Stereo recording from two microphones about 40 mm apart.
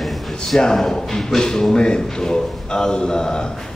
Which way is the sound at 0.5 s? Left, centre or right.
Centre.